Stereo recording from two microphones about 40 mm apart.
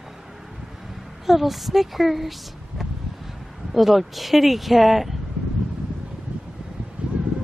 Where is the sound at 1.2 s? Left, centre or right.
Centre.